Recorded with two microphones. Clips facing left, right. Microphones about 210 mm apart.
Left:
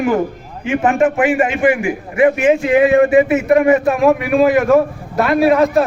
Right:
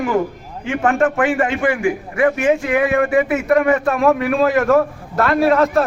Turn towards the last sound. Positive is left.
turn(degrees=15)  # may be behind; listen again after turning